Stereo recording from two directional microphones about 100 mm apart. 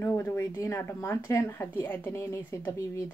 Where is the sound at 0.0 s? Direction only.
25° left (ahead or behind).